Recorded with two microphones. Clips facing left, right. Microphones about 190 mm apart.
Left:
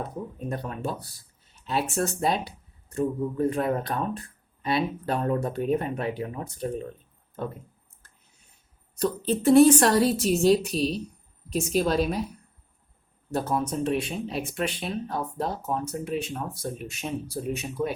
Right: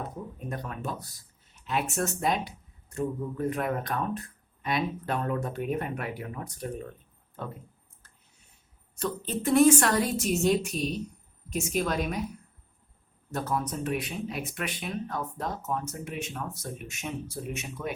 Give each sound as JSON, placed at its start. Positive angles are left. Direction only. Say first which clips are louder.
{"t": 0.3, "sound": "speech", "louder": "left 5 dB", "side_deg": 30}
{"t": 9.0, "sound": "speech", "louder": "left 6 dB", "side_deg": 35}
{"t": 13.3, "sound": "speech", "louder": "left 4 dB", "side_deg": 30}